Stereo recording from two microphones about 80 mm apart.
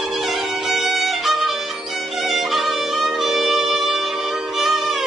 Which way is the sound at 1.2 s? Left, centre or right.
Centre.